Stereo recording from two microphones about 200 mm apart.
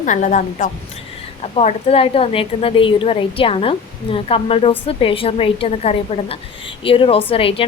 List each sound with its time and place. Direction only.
0.0 s a woman's voice: 40° left (ahead or behind)